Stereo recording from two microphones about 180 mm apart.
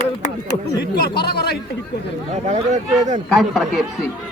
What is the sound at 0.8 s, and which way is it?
Speech, 65° left (ahead or behind).